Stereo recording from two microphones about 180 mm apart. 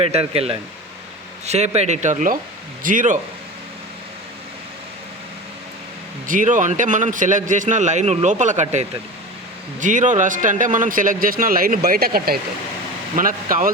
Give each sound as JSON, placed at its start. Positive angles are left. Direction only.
{"t": 0.0, "sound": "a man's voice", "side_deg": -35}
{"t": 6.2, "sound": "a man's voice", "side_deg": -45}